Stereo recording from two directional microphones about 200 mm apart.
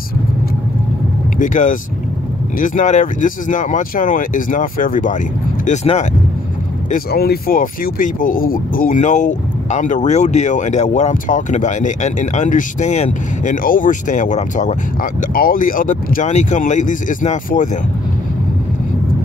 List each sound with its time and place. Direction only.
1.4 s speech: 40° left (ahead or behind)
6.9 s speech: 50° left (ahead or behind)